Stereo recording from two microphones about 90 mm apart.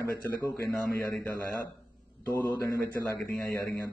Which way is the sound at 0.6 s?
20° left (ahead or behind).